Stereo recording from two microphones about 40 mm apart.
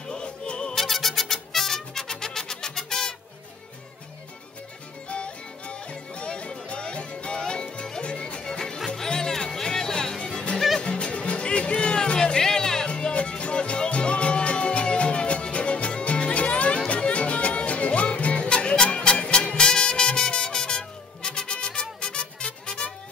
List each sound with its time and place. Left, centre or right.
0.1 s music: left
0.7 s music: centre
5.1 s music: left; by 10.4 s centre
10.8 s music: left
13.1 s music: left